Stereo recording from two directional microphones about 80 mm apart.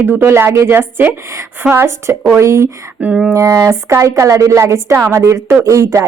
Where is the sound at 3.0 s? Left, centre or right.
Centre.